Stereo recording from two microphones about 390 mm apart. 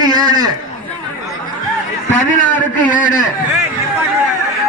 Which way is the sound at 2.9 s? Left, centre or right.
Centre.